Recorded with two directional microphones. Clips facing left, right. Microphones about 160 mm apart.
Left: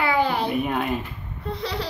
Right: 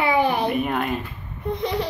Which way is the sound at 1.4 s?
15° right (ahead or behind).